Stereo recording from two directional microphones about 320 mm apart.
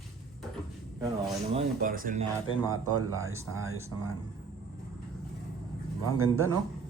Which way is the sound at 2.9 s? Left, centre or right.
Centre.